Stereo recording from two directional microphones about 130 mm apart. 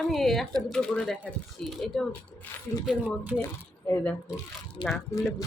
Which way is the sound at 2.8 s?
10° right (ahead or behind).